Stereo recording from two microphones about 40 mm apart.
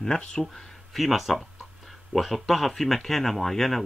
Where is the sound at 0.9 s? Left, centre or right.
Centre.